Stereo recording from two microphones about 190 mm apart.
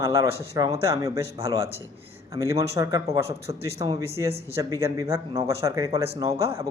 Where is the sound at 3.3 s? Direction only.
30° right (ahead or behind).